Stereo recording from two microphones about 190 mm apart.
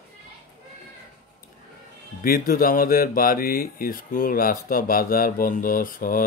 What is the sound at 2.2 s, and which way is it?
Speech, 50° left (ahead or behind).